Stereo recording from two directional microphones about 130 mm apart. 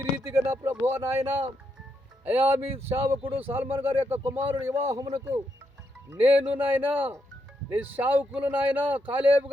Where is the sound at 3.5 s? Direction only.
15° right (ahead or behind).